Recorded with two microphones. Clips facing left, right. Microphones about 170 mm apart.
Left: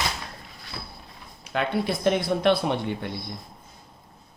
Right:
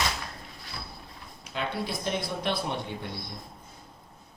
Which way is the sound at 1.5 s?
65° left (ahead or behind).